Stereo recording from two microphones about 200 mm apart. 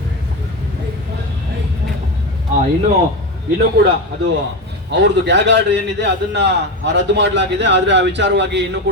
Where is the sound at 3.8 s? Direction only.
55° right (ahead or behind).